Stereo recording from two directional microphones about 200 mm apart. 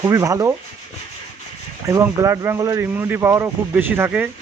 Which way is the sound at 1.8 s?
15° right (ahead or behind).